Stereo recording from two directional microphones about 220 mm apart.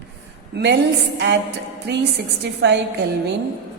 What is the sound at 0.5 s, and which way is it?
A woman's voice, 50° right (ahead or behind).